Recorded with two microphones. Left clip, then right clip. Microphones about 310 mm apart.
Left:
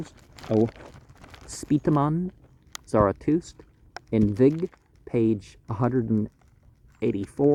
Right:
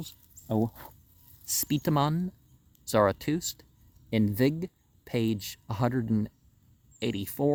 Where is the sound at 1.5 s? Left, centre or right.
Centre.